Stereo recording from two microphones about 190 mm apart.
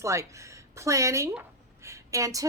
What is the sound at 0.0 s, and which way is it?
A woman's voice, 15° right (ahead or behind).